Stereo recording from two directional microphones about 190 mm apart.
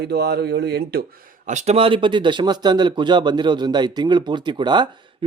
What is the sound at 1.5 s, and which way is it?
Speech, 35° right (ahead or behind).